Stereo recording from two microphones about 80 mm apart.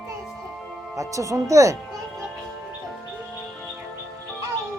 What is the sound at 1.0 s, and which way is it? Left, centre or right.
Speech, right.